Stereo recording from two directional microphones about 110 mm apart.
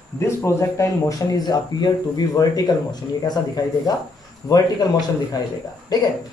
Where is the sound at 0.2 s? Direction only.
25° left (ahead or behind).